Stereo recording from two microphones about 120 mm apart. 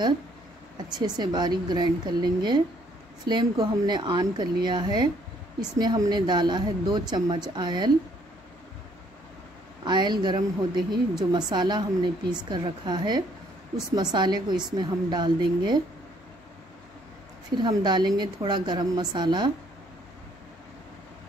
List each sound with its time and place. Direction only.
0.9 s a woman's voice: 35° right (ahead or behind)
9.8 s a woman's voice: 40° right (ahead or behind)
17.6 s a woman's voice: 40° right (ahead or behind)